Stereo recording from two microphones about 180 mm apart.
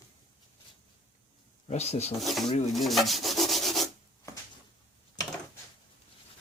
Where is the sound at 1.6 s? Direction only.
35° left (ahead or behind).